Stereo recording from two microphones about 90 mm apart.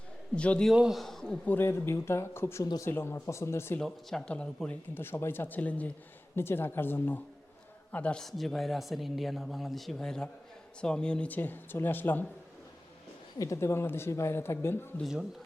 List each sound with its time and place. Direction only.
0.3 s speech: 15° left (ahead or behind)
0.7 s speech: 5° right (ahead or behind)
1.5 s speech: 25° left (ahead or behind)
3.8 s speech: 5° left (ahead or behind)
4.9 s speech: 25° left (ahead or behind)
8.2 s speech: 5° left (ahead or behind); by 12.2 s 20° left (ahead or behind)
13.4 s speech: 35° left (ahead or behind)
15.0 s speech: 5° right (ahead or behind)